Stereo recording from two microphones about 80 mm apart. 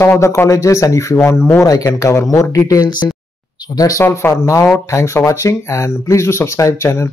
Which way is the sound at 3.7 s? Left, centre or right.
Left.